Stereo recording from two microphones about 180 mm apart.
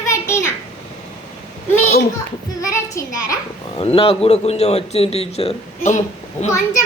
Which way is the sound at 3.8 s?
30° left (ahead or behind).